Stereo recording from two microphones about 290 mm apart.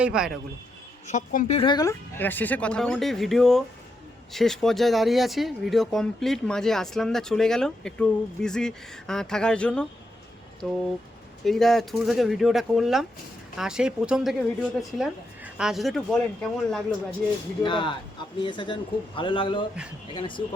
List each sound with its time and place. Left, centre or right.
0.0 s speech: centre
1.0 s speech: left; by 9.8 s centre
11.4 s speech: centre
17.6 s speech: centre